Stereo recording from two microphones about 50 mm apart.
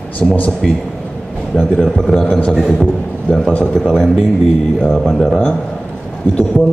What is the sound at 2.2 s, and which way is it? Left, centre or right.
A man's voice, left.